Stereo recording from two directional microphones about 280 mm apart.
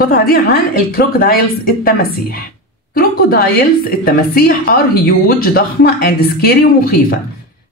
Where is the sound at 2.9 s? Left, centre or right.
Left.